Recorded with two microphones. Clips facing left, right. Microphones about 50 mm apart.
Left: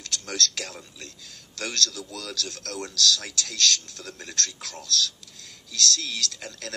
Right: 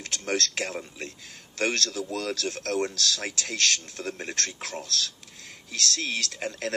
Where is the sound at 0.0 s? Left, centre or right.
Right.